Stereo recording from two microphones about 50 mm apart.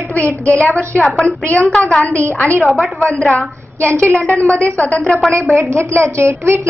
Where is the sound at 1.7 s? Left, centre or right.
Centre.